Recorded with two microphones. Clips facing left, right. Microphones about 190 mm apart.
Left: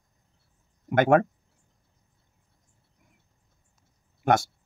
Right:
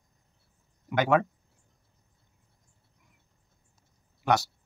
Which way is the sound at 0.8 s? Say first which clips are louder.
Left 4 dB; 50° left (ahead or behind).